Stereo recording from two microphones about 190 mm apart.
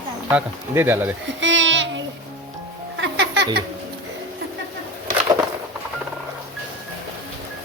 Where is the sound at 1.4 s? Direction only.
75° right (ahead or behind).